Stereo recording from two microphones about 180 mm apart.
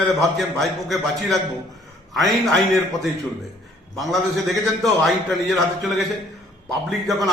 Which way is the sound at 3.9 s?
Centre (ahead or behind).